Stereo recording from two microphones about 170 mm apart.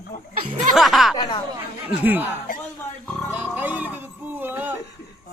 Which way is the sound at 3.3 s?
10° right (ahead or behind).